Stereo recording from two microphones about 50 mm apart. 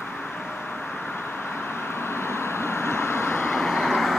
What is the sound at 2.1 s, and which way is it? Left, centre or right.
Vehicle, left.